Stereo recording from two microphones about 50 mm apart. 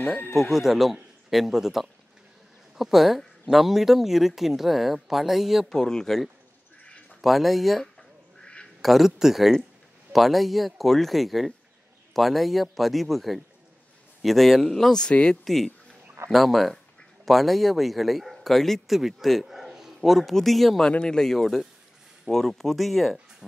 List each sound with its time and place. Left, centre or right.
0.4 s speech: centre
5.7 s speech: centre
7.2 s speech: centre
8.4 s quack: left
8.8 s speech: centre
15.4 s a man's voice: centre
21.0 s speech: centre